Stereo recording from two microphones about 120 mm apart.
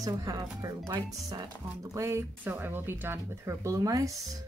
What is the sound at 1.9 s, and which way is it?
Speech, 25° right (ahead or behind).